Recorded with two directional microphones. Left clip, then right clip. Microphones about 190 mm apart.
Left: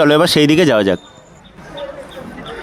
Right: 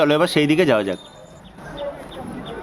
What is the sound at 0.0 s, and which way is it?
Speech, 35° left (ahead or behind).